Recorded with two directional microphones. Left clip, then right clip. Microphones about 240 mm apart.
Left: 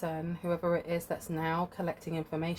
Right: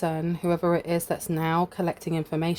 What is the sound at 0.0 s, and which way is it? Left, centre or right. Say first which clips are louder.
Speech: right 8 dB; right.